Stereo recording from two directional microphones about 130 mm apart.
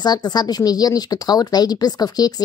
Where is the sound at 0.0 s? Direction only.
30° left (ahead or behind).